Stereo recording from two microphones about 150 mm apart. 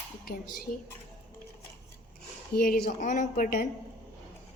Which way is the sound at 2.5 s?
90° left.